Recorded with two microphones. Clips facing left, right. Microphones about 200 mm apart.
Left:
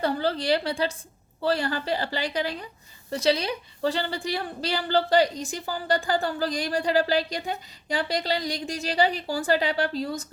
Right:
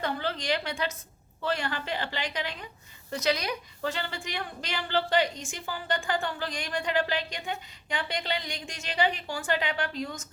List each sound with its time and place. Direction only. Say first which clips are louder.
0.0 s a woman's voice: left 6 dB; 35° left (ahead or behind)